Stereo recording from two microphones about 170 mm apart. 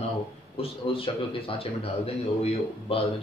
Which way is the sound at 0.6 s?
30° left (ahead or behind).